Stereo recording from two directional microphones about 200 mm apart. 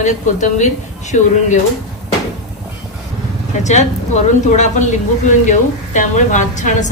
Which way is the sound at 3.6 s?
35° left (ahead or behind).